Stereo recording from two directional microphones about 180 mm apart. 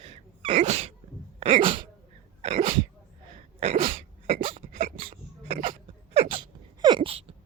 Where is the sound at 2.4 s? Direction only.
35° right (ahead or behind).